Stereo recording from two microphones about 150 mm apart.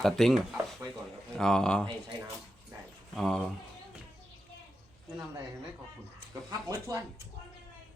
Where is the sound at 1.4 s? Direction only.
5° left (ahead or behind).